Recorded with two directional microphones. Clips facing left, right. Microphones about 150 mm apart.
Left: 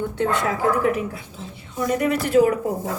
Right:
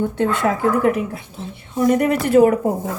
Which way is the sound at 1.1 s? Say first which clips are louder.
Right 4 dB; 60° right (ahead or behind).